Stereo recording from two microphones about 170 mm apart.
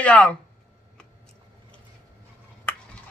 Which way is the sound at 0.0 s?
10° left (ahead or behind).